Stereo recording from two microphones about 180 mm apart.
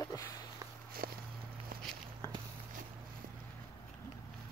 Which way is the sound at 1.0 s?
55° right (ahead or behind).